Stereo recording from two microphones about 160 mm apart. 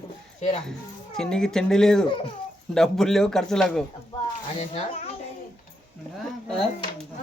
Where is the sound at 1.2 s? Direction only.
5° left (ahead or behind).